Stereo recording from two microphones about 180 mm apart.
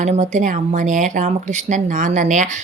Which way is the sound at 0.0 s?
40° right (ahead or behind).